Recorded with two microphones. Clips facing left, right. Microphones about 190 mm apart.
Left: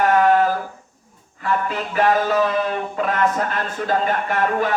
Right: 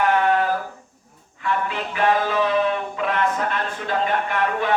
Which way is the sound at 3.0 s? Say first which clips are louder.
Left 3 dB; 45° left (ahead or behind).